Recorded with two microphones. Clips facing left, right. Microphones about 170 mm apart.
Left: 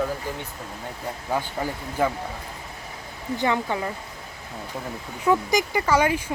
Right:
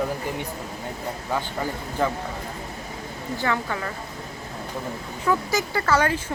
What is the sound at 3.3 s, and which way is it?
Speech, 20° left (ahead or behind).